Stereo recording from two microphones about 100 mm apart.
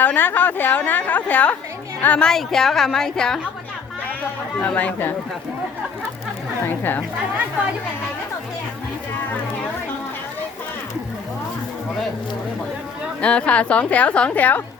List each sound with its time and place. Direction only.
0.0 s a woman's voice: 20° left (ahead or behind)
4.6 s a woman's voice: 15° left (ahead or behind)
6.7 s a woman's voice: 20° left (ahead or behind)
13.2 s a woman's voice: 10° left (ahead or behind)